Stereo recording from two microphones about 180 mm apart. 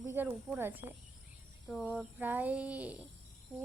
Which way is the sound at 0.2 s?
10° right (ahead or behind).